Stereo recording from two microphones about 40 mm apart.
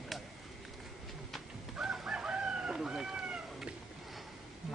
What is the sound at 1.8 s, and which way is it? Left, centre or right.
Chicken, centre.